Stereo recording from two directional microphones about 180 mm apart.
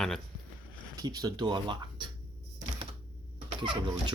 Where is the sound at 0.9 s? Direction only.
20° right (ahead or behind).